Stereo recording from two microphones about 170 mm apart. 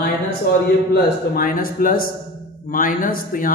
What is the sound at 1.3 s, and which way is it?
A man's voice, 60° left (ahead or behind).